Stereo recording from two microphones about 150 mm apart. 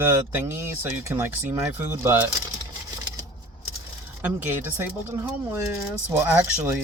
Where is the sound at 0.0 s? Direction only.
15° right (ahead or behind).